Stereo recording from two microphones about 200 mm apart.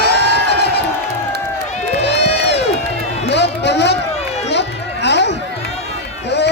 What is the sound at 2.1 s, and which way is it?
Crowd, 60° left (ahead or behind).